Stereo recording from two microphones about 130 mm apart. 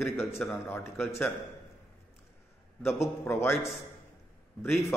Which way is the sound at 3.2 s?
20° left (ahead or behind).